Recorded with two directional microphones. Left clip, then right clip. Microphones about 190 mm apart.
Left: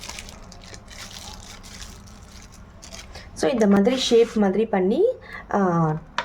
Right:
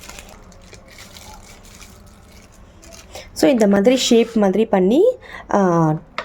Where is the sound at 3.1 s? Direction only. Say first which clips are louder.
Right 7 dB; 40° right (ahead or behind).